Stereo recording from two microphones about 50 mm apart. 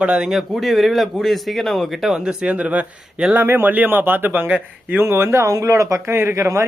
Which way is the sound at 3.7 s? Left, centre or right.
Right.